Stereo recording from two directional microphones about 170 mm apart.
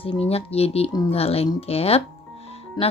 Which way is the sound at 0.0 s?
35° left (ahead or behind).